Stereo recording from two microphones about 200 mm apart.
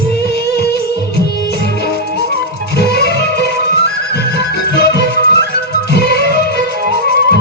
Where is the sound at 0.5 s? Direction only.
55° left (ahead or behind).